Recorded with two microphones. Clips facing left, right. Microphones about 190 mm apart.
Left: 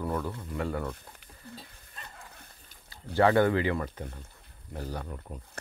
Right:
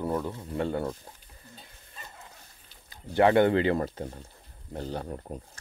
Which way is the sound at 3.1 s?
20° right (ahead or behind).